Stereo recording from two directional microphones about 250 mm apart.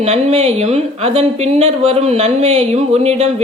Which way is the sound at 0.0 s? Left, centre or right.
Right.